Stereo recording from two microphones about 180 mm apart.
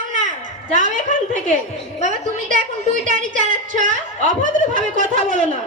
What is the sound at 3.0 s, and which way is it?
A woman's voice, 45° right (ahead or behind).